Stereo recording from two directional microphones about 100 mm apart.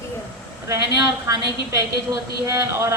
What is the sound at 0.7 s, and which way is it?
A woman's voice, 35° right (ahead or behind).